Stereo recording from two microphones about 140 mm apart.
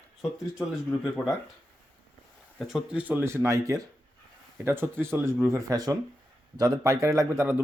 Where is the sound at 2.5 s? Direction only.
5° right (ahead or behind).